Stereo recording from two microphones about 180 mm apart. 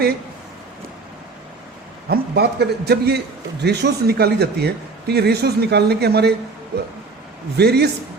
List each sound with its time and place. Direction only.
2.0 s a man's voice: 65° right (ahead or behind)
7.5 s a man's voice: 65° right (ahead or behind)